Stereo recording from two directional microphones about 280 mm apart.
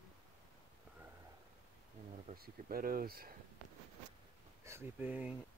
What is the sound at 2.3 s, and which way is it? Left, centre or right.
Speech, right.